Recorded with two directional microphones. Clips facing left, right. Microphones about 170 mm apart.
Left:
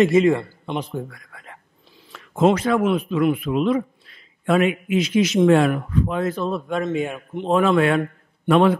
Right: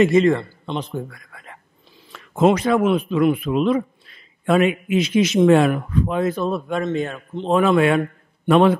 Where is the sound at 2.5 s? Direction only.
20° right (ahead or behind).